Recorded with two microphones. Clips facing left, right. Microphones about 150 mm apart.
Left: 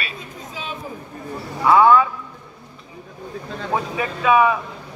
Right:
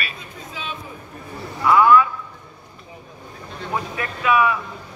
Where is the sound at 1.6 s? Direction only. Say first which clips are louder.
Left 1 dB; 25° left (ahead or behind).